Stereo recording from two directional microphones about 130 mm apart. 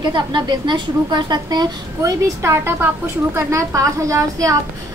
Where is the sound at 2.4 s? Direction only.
20° right (ahead or behind).